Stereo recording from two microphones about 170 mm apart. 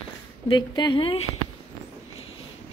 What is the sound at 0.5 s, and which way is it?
Speech, 25° left (ahead or behind).